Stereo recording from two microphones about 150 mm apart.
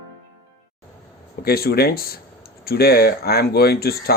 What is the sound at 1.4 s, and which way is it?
Speech, 90° left.